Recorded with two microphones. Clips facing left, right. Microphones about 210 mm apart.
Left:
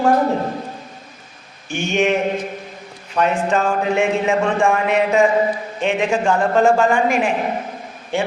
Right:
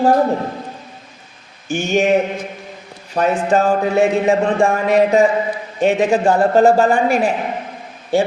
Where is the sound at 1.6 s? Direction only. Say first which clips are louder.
Right 3 dB; 40° right (ahead or behind).